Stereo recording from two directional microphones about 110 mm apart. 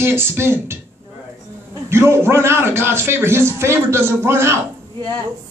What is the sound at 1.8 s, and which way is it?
Speech, 25° right (ahead or behind).